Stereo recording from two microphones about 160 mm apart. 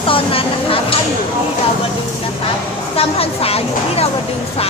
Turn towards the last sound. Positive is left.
turn(degrees=40)  # may be behind; listen again after turning